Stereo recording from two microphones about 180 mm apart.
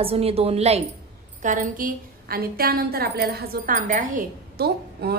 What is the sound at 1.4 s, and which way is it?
A woman's voice, 45° right (ahead or behind).